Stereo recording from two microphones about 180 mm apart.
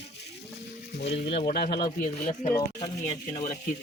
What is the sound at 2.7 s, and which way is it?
Speech, 25° left (ahead or behind).